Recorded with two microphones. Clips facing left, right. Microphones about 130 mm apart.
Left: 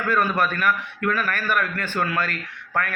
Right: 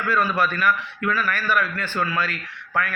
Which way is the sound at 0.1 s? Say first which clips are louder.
Even; 50° left (ahead or behind).